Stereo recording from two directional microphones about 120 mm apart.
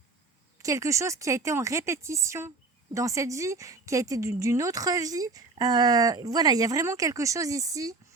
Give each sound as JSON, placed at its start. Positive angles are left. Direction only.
{"t": 0.6, "sound": "a woman's voice", "side_deg": -25}